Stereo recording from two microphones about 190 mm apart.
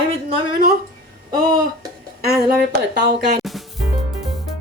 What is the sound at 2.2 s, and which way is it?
Speech, 60° right (ahead or behind).